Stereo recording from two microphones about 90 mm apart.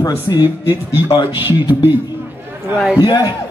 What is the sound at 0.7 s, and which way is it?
Speech, 25° right (ahead or behind).